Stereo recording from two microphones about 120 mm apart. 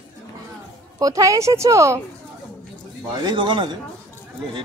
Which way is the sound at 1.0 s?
30° right (ahead or behind).